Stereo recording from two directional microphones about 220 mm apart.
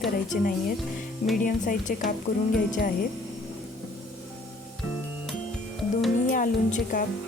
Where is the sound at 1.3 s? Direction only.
40° left (ahead or behind).